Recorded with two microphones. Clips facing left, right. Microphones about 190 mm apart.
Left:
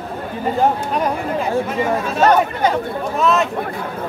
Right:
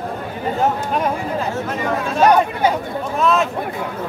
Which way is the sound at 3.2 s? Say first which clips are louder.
Even; centre (ahead or behind).